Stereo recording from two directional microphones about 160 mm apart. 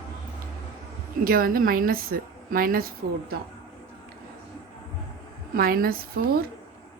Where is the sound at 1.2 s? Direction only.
65° right (ahead or behind).